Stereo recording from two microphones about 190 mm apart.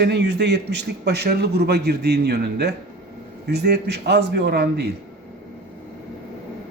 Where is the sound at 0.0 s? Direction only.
65° right (ahead or behind).